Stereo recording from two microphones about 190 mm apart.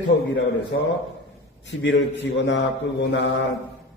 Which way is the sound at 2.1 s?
70° left (ahead or behind).